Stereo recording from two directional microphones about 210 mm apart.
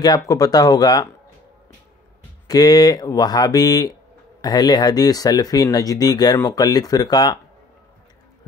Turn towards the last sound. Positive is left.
turn(degrees=20)  # may be behind; listen again after turning